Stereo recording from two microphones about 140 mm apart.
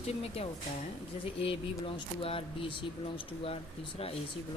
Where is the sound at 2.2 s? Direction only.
40° left (ahead or behind).